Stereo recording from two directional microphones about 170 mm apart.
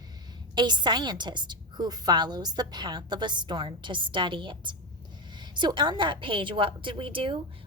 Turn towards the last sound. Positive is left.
turn(degrees=-30)  # may be behind; listen again after turning